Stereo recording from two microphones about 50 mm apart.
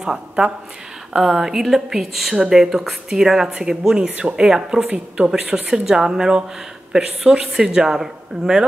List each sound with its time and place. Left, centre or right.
0.0 s a woman's voice: centre